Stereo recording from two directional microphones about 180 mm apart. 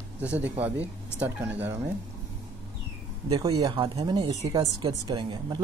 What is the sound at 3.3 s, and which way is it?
Speech, 20° right (ahead or behind).